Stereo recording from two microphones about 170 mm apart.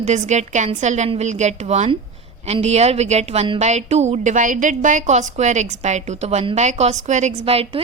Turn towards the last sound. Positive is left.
turn(degrees=-35)  # may be behind; listen again after turning